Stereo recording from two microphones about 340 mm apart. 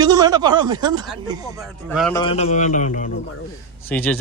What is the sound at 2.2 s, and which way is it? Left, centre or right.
Speech, centre.